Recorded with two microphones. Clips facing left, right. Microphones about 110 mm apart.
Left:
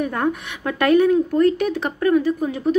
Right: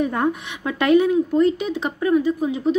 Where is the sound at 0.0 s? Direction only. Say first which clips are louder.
Right 1 dB; 20° right (ahead or behind).